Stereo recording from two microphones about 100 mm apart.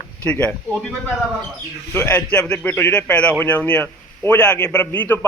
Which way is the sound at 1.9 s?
25° left (ahead or behind).